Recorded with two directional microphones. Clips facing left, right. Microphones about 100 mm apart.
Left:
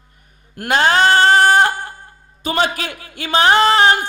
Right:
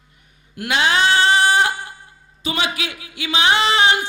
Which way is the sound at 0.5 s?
45° left (ahead or behind).